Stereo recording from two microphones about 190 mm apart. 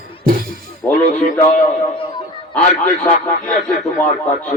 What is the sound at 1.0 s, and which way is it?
Speech, 40° left (ahead or behind).